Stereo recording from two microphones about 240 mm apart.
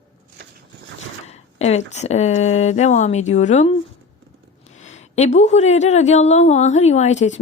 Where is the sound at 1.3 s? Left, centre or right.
Left.